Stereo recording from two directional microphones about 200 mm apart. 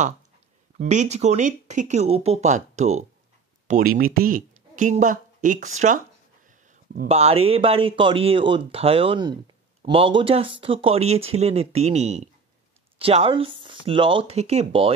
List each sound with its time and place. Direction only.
0.7 s speech: 35° right (ahead or behind)
7.1 s speech: 30° right (ahead or behind)